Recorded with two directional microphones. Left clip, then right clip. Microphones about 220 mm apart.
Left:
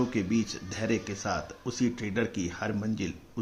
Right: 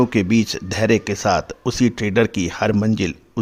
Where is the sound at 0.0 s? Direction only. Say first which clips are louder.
Right 12 dB; 50° right (ahead or behind).